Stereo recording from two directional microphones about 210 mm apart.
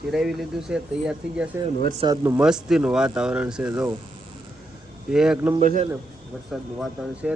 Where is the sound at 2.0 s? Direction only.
15° right (ahead or behind).